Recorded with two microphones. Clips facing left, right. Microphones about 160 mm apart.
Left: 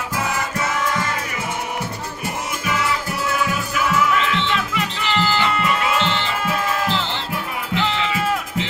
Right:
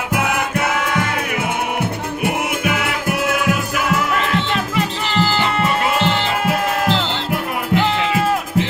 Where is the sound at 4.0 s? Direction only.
50° right (ahead or behind).